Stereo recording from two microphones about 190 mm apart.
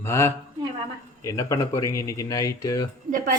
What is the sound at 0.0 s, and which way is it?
Speech, 15° left (ahead or behind).